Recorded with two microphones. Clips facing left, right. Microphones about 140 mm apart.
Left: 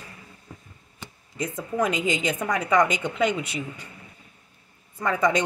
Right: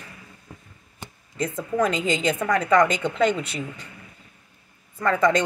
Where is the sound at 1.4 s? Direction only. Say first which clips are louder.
Right 3 dB; 15° left (ahead or behind).